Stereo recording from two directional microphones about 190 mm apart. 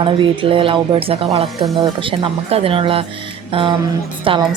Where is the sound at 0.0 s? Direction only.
25° right (ahead or behind).